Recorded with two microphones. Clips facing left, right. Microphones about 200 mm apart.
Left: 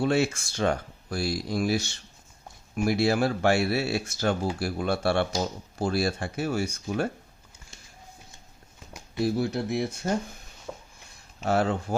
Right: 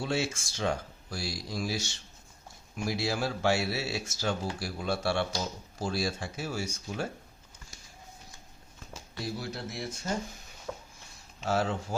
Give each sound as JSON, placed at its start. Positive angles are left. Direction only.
{"t": 0.0, "sound": "speech", "side_deg": 60}
{"t": 9.2, "sound": "speech", "side_deg": 60}
{"t": 10.7, "sound": "a sound", "side_deg": 5}
{"t": 11.4, "sound": "speech", "side_deg": 60}